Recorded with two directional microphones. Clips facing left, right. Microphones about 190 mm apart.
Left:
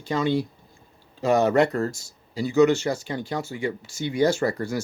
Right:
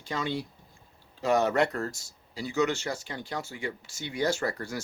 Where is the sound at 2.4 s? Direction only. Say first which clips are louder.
Left 9 dB; 40° left (ahead or behind).